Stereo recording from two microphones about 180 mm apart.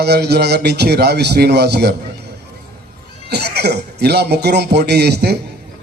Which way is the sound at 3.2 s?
65° right (ahead or behind).